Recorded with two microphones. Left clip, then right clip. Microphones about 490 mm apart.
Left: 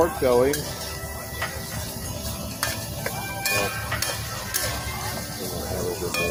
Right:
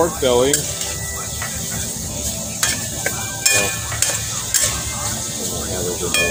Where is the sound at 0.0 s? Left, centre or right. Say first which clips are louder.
Right 4 dB; left.